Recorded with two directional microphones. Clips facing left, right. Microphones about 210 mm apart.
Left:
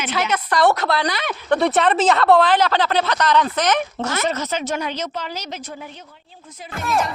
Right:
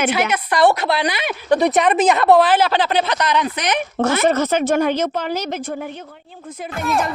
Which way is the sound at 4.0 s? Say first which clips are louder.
Right 7 dB; 55° right (ahead or behind).